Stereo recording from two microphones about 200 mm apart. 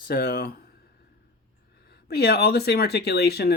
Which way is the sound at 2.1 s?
55° left (ahead or behind).